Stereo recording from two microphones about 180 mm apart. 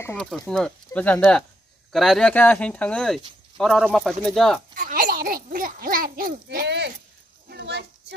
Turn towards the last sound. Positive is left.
turn(degrees=-70)  # may be behind; listen again after turning